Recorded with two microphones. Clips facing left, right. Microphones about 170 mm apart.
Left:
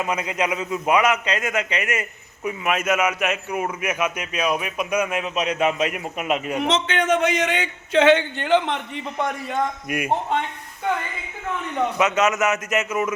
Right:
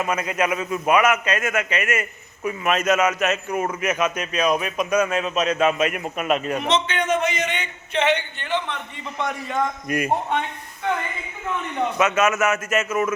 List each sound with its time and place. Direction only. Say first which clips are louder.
0.0 s a man's voice: right 1 dB; 15° left (ahead or behind)
6.8 s a man's voice: left 2 dB; 90° left
9.8 s a man's voice: right 2 dB; 10° left (ahead or behind)
11.9 s a man's voice: right 1 dB; 20° left (ahead or behind)